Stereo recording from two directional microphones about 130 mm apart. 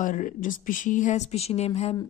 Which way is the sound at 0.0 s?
90° left.